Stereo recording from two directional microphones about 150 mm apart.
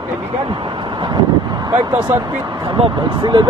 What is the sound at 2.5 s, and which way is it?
Speech, 35° right (ahead or behind).